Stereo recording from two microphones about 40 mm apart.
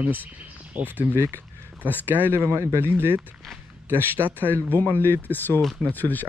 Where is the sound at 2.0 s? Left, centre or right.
Right.